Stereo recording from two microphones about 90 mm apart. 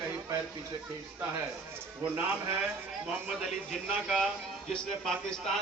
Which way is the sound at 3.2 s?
5° right (ahead or behind).